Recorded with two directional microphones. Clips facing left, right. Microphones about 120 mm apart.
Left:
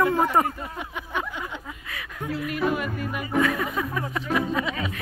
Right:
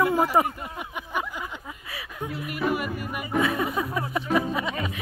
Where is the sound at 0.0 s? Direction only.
10° right (ahead or behind).